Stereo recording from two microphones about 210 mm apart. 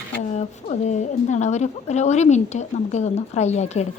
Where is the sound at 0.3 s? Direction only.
35° left (ahead or behind).